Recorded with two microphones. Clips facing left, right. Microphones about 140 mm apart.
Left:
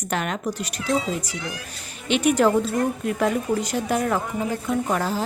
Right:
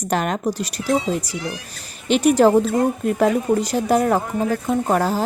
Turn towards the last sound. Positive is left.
turn(degrees=-45)  # may be behind; listen again after turning